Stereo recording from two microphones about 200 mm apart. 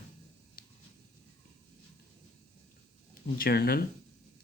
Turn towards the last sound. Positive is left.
turn(degrees=50)  # may be behind; listen again after turning